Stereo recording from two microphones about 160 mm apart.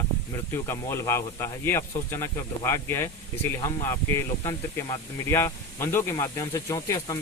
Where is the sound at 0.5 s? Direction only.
15° left (ahead or behind).